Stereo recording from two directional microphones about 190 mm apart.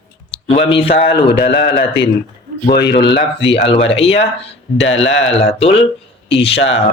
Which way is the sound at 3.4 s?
30° left (ahead or behind).